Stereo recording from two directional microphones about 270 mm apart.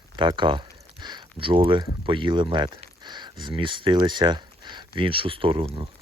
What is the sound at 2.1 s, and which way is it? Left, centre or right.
Speech, centre.